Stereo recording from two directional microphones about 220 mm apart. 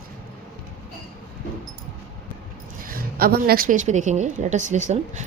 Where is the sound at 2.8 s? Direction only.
40° right (ahead or behind).